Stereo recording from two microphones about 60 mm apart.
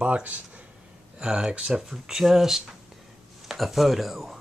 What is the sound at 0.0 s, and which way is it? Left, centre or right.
Speech, right.